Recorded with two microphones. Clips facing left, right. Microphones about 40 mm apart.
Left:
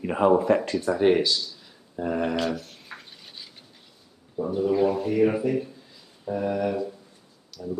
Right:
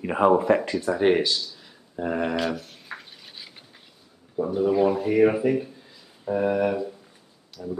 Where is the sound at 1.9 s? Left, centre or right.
Centre.